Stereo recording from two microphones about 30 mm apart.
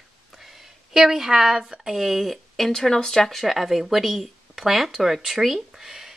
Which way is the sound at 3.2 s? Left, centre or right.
Centre.